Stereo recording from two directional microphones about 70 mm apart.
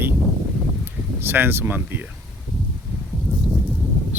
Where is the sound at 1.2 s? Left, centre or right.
Right.